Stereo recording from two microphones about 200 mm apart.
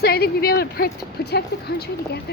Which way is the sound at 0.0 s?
50° left (ahead or behind).